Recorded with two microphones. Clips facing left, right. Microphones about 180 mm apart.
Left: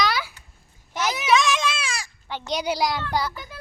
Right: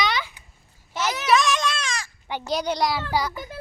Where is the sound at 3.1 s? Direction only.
10° right (ahead or behind).